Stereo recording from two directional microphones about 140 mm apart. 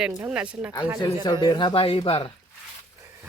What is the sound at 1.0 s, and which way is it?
Speech, 30° left (ahead or behind).